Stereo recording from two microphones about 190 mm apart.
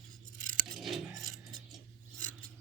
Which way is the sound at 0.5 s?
Centre (ahead or behind).